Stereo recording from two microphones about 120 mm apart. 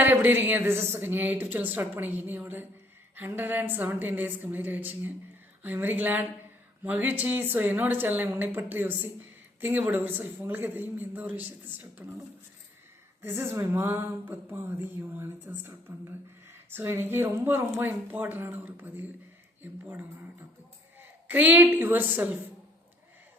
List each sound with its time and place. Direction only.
0.0 s speech: 15° right (ahead or behind)
13.2 s a woman's voice: 20° right (ahead or behind)
21.0 s a woman's voice: 15° right (ahead or behind)